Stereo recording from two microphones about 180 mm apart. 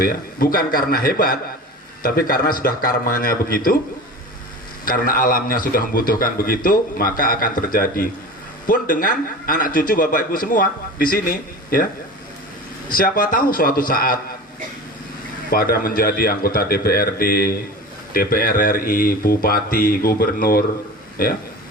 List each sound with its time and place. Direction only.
0.0 s a man's voice: 55° left (ahead or behind)
4.9 s a man's voice: 50° left (ahead or behind)
12.9 s a man's voice: 50° left (ahead or behind)
15.4 s a man's voice: 55° left (ahead or behind)